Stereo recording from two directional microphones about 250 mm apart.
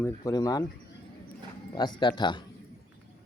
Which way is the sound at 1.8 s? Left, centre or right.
Centre.